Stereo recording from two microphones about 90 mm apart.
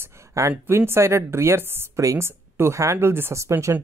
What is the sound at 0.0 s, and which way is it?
Speech, 35° right (ahead or behind).